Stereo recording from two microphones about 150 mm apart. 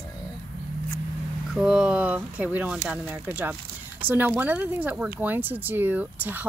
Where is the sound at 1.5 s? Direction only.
5° right (ahead or behind).